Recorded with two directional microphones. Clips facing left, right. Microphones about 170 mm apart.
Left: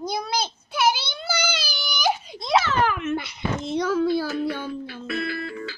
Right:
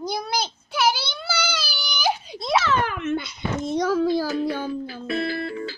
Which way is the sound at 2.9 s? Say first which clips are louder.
Even; 70° left (ahead or behind).